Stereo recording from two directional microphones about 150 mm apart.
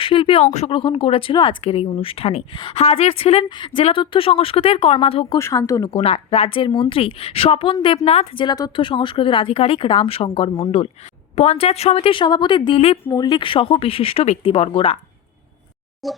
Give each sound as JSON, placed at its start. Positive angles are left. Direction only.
{"t": 0.0, "sound": "speech", "side_deg": 35}
{"t": 0.7, "sound": "speech", "side_deg": 35}
{"t": 5.4, "sound": "speech", "side_deg": 20}
{"t": 5.9, "sound": "speech", "side_deg": 40}
{"t": 13.1, "sound": "speech", "side_deg": 30}
{"t": 16.0, "sound": "speech", "side_deg": 0}